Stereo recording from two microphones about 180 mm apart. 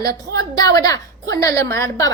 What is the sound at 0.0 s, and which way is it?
A woman's voice, 20° left (ahead or behind).